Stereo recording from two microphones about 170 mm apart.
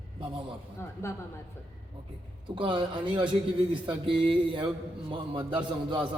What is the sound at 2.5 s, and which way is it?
A man's voice, 30° right (ahead or behind).